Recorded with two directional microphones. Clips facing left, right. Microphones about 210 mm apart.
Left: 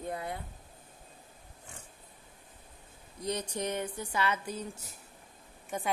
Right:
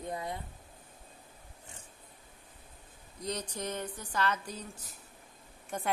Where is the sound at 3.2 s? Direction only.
10° left (ahead or behind).